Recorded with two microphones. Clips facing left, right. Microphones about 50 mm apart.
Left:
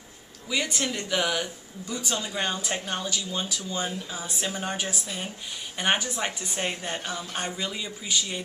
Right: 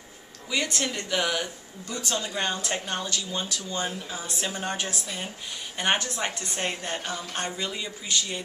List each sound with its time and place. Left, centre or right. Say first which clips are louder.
0.5 s speech: even; centre